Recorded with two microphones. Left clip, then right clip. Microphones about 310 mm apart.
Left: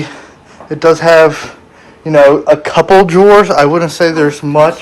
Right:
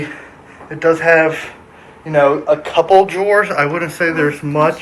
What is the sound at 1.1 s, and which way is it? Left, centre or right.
Speech, left.